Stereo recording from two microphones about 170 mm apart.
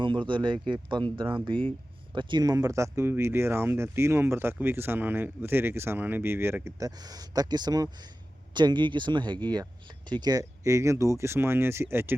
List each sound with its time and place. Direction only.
0.0 s speech: 30° right (ahead or behind); by 12.1 s 15° right (ahead or behind)